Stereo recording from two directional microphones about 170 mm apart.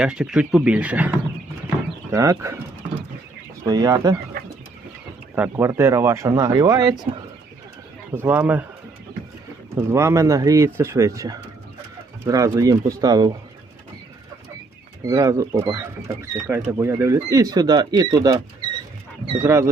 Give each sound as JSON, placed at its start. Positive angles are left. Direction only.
{"t": 0.0, "sound": "a man's voice", "side_deg": -5}
{"t": 3.7, "sound": "speech", "side_deg": -25}
{"t": 8.1, "sound": "a man's voice", "side_deg": -10}
{"t": 9.7, "sound": "speech", "side_deg": -15}
{"t": 15.0, "sound": "speech", "side_deg": -20}
{"t": 19.4, "sound": "a man's voice", "side_deg": -15}